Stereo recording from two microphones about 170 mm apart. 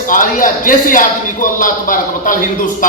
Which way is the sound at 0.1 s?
55° left (ahead or behind).